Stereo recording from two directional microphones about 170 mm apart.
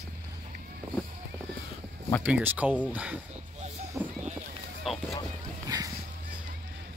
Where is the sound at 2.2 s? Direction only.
10° right (ahead or behind).